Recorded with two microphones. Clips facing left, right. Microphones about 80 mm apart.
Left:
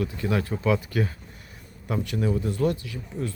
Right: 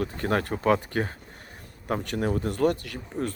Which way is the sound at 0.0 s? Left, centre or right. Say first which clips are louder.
Even; right.